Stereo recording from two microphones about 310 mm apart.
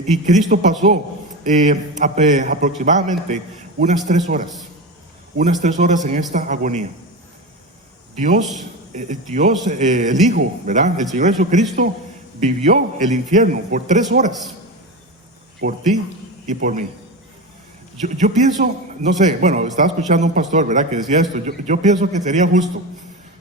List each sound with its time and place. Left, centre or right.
0.1 s a man's voice: right
5.4 s a man's voice: right
8.1 s a man's voice: right
15.6 s a man's voice: right
18.0 s a man's voice: right